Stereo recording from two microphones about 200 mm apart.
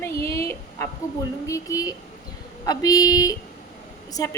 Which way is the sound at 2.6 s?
20° left (ahead or behind).